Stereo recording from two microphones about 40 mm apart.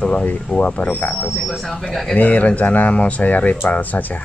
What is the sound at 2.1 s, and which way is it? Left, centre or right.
Speech, left.